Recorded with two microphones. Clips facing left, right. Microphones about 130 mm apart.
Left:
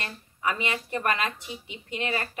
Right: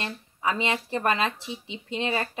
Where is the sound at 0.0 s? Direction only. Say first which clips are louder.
Right 2 dB; 25° right (ahead or behind).